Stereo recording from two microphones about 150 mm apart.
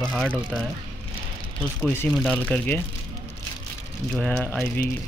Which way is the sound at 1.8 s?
15° left (ahead or behind).